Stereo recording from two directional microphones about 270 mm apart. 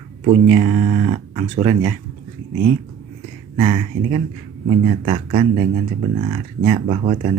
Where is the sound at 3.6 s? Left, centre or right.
Right.